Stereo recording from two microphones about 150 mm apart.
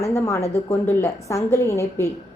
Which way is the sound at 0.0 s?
20° left (ahead or behind).